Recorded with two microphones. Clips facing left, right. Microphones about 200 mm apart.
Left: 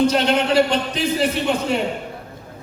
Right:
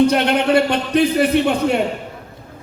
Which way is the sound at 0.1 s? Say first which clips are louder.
Right 3 dB; 60° right (ahead or behind).